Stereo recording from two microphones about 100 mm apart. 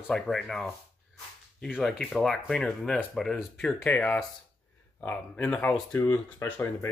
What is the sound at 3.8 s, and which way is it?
Speech, 15° left (ahead or behind).